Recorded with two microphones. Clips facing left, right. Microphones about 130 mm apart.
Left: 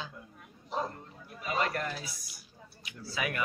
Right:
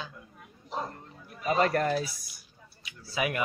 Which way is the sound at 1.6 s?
45° right (ahead or behind).